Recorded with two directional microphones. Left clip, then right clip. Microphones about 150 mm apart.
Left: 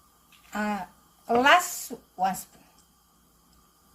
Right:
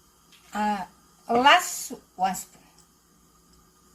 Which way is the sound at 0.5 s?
25° left (ahead or behind).